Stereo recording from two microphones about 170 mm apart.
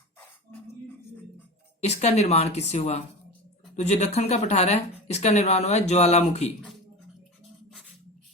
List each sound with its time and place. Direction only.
1.8 s speech: 40° left (ahead or behind)